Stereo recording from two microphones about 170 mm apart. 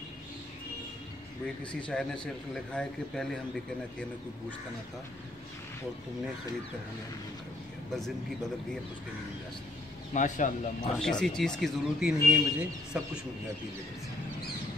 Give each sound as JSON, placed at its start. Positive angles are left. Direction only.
{"t": 1.6, "sound": "speech", "side_deg": 5}
{"t": 10.1, "sound": "speech", "side_deg": 50}
{"t": 11.0, "sound": "speech", "side_deg": 5}